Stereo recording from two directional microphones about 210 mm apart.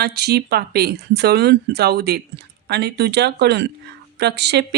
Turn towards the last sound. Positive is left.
turn(degrees=-55)  # may be behind; listen again after turning